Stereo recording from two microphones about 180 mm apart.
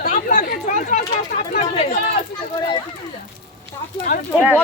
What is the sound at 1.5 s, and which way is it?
Speech, 35° left (ahead or behind).